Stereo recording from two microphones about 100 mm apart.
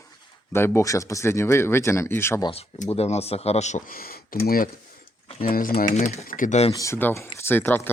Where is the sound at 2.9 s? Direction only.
90° left.